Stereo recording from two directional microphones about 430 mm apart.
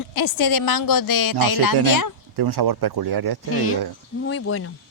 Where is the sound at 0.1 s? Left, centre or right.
Left.